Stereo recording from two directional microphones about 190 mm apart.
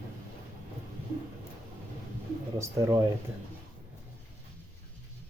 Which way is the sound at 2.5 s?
15° right (ahead or behind).